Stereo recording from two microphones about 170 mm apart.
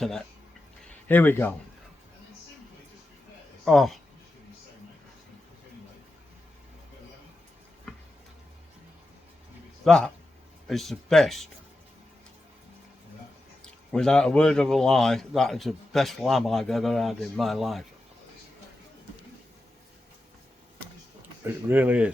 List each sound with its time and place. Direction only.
0.0 s a man's voice: 5° left (ahead or behind)
3.7 s a man's voice: centre (ahead or behind)
9.8 s a man's voice: 5° left (ahead or behind)
13.9 s a man's voice: 5° left (ahead or behind)
21.2 s speech: 10° right (ahead or behind)